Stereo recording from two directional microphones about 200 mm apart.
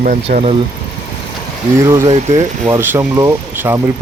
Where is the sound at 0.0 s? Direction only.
35° right (ahead or behind).